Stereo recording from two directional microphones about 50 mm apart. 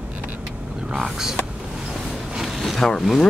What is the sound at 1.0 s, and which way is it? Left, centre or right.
Speech, centre.